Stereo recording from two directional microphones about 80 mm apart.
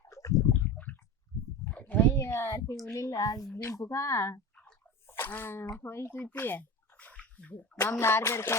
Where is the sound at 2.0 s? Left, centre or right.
Left.